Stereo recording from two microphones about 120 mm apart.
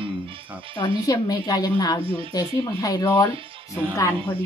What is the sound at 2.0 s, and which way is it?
Speech, 50° right (ahead or behind).